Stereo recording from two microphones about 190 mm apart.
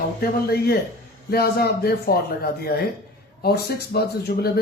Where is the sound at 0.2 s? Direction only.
55° left (ahead or behind).